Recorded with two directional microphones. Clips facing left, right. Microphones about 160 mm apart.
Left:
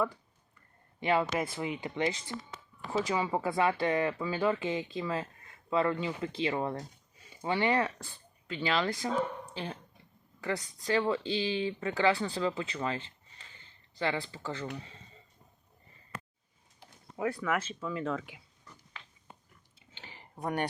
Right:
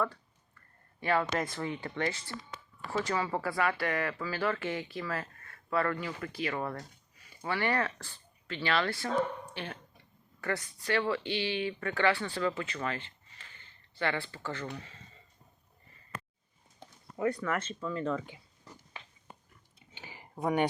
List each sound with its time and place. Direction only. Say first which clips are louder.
0.9 s speech: left 1 dB; 20° left (ahead or behind)
14.0 s speech: even; 15° left (ahead or behind)
17.2 s speech: even; 5° left (ahead or behind)
19.9 s a sound: right 2 dB; 10° right (ahead or behind)